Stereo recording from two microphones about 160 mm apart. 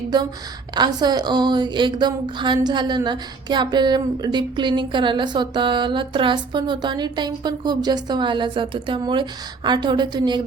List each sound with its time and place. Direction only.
0.7 s a woman's voice: 25° right (ahead or behind)